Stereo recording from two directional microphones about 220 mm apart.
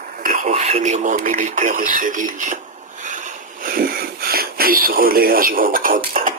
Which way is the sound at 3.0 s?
35° right (ahead or behind).